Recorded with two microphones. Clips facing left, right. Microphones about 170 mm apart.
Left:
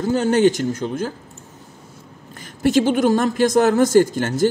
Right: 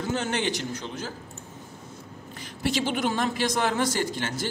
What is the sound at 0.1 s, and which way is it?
A man's voice, 40° left (ahead or behind).